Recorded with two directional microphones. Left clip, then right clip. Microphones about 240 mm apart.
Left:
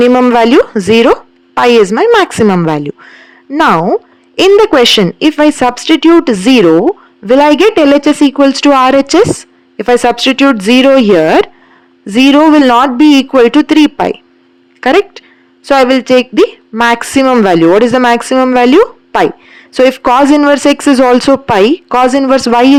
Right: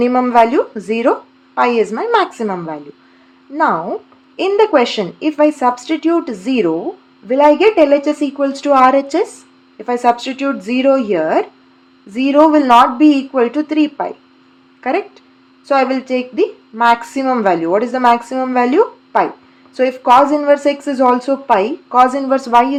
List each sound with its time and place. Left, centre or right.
0.0 s speech: left